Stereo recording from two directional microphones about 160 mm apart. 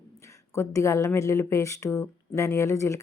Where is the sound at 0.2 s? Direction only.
20° left (ahead or behind).